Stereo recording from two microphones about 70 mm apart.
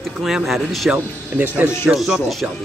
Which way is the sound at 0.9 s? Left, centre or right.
Right.